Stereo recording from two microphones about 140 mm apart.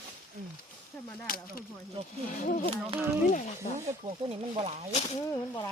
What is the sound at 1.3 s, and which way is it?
Speech, 90° left.